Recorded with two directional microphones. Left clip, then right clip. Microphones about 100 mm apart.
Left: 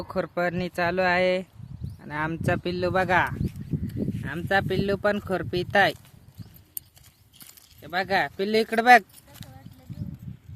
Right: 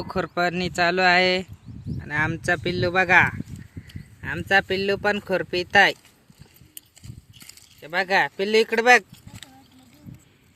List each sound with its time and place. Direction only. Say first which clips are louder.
0.0 s speech: right 3 dB; 10° left (ahead or behind)
2.0 s speech: right 5 dB; 15° left (ahead or behind)
2.3 s speech: right 3 dB; 35° left (ahead or behind)
4.2 s speech: right 5 dB; 45° left (ahead or behind)
7.8 s speech: right 4 dB; 35° left (ahead or behind); by 9.0 s 55° left (ahead or behind)